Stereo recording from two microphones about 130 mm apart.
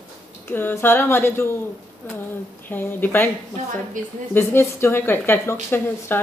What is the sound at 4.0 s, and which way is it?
Speech, 90° right.